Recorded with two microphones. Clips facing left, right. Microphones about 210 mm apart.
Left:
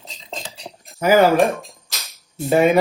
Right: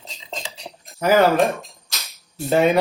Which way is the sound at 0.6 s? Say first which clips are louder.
Left 2 dB; centre (ahead or behind).